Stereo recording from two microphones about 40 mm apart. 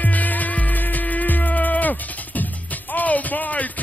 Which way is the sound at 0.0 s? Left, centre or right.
Left.